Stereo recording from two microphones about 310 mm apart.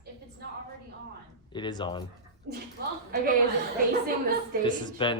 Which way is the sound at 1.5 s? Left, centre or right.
Centre.